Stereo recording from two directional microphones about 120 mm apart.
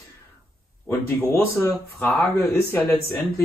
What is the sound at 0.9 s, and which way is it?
Speech, 20° left (ahead or behind).